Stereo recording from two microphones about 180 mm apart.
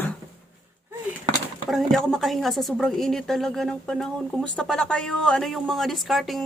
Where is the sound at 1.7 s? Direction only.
Centre (ahead or behind).